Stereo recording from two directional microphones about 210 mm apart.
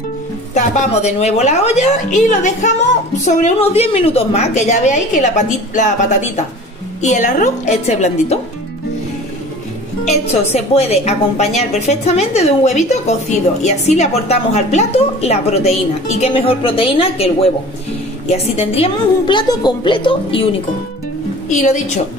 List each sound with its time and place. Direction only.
0.6 s a woman's voice: 35° left (ahead or behind)
10.2 s a woman's voice: 30° left (ahead or behind)
21.5 s a woman's voice: 35° left (ahead or behind)